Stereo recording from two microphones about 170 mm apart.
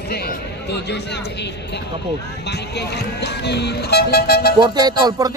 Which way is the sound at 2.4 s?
80° left.